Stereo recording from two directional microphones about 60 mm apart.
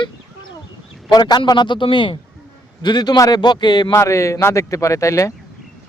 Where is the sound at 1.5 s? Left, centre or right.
Left.